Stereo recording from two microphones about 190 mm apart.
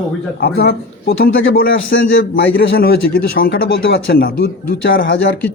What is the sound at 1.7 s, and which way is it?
Speech, 90° left.